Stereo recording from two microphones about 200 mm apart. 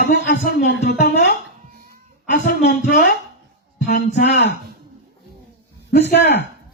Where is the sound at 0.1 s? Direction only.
50° left (ahead or behind).